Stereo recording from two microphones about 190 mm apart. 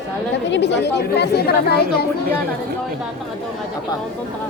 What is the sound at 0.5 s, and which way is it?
Speech, 65° left (ahead or behind).